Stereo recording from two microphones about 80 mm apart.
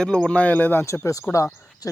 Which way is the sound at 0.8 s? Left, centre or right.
Left.